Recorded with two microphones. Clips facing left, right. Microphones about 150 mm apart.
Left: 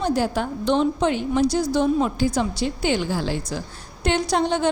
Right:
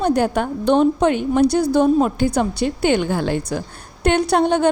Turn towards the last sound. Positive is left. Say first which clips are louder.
# right 5 dB
turn(degrees=-55)  # may be behind; listen again after turning